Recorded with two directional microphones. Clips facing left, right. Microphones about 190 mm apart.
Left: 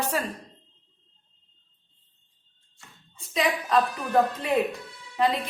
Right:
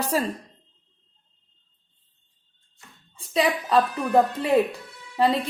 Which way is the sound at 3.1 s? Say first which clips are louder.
Right 3 dB; 30° right (ahead or behind).